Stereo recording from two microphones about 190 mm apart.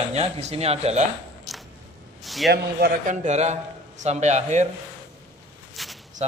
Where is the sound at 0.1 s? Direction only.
35° right (ahead or behind).